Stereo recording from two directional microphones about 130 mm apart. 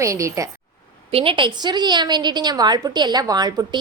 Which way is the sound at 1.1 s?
45° right (ahead or behind).